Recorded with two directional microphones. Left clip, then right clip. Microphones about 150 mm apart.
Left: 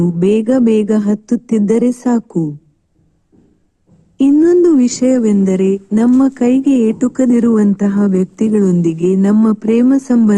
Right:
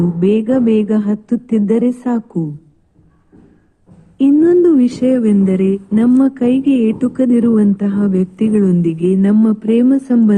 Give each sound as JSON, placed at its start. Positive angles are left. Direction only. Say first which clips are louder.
{"t": 0.0, "sound": "speech", "louder": "left 1 dB", "side_deg": 60}
{"t": 4.2, "sound": "speech", "louder": "left 1 dB", "side_deg": 60}